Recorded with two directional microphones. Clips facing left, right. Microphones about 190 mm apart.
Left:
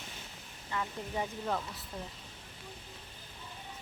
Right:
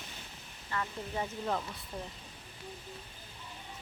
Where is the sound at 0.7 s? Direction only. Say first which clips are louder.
Even; 10° left (ahead or behind).